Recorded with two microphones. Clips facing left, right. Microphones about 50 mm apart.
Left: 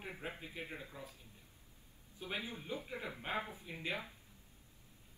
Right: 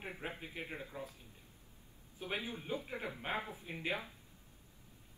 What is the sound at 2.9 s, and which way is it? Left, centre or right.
Speech, right.